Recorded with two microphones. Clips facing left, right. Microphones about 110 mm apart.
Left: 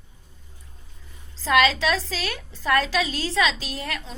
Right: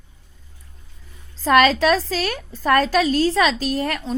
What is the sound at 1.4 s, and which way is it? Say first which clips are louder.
A woman's voice: right 5 dB; 50° right (ahead or behind).